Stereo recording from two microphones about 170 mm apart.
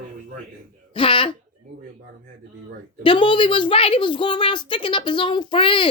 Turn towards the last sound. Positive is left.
turn(degrees=30)  # may be behind; listen again after turning